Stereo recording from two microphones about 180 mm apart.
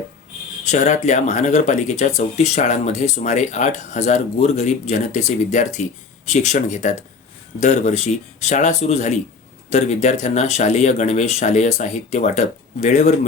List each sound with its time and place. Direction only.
0.7 s speech: 40° left (ahead or behind)